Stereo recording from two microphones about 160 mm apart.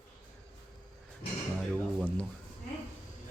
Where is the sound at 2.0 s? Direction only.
10° left (ahead or behind).